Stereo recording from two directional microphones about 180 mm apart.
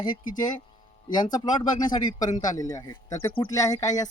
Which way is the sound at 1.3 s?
20° left (ahead or behind).